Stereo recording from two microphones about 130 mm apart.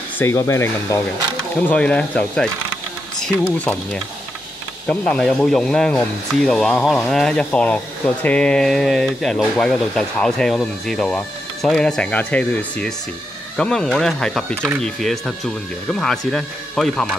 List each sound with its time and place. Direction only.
0.2 s speech: 20° left (ahead or behind)
1.7 s speech: 10° left (ahead or behind)